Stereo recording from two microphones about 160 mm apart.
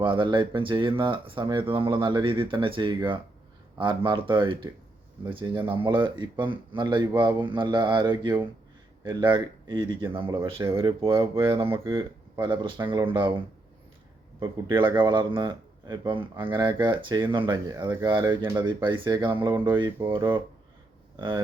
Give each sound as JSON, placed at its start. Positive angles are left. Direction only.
{"t": 0.0, "sound": "speech", "side_deg": -30}
{"t": 10.6, "sound": "speech", "side_deg": -15}
{"t": 11.9, "sound": "speech", "side_deg": -30}
{"t": 21.2, "sound": "speech", "side_deg": -30}